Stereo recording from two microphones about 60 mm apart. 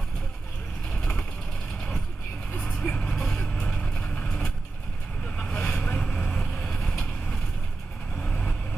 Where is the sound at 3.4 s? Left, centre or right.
Left.